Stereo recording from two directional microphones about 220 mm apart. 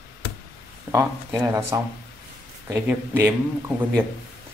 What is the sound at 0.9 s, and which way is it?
Speech, 15° right (ahead or behind).